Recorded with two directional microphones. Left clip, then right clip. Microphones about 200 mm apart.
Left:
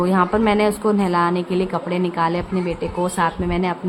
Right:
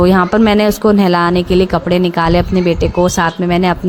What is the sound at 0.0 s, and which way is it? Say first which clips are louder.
A woman's voice: right 7 dB; 35° right (ahead or behind).